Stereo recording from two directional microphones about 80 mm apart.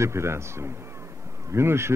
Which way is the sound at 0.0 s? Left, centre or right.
Right.